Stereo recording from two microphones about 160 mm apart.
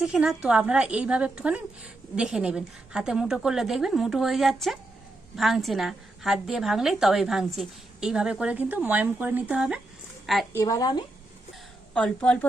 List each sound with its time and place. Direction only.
0.0 s a woman's voice: 5° right (ahead or behind)
10.5 s a woman's voice: 20° left (ahead or behind)
11.9 s a woman's voice: 5° left (ahead or behind)